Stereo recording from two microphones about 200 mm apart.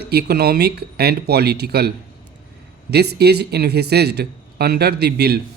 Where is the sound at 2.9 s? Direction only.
55° right (ahead or behind).